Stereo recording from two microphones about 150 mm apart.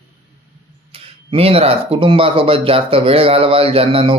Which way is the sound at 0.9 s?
40° right (ahead or behind).